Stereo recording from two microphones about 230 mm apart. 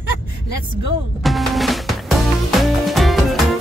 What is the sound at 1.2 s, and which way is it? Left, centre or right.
Music, centre.